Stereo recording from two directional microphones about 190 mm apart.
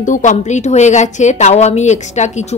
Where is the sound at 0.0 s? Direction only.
40° left (ahead or behind).